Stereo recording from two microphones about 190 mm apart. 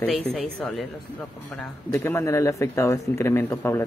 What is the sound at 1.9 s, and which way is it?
Speech, 10° left (ahead or behind).